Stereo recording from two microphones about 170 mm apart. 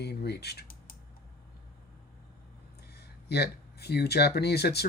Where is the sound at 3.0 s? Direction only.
70° left (ahead or behind).